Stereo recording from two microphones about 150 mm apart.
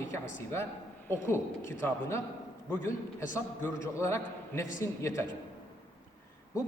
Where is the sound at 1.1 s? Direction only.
15° left (ahead or behind).